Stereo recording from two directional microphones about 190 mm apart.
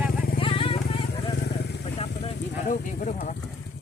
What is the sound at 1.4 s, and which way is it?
Vehicle, 60° left (ahead or behind).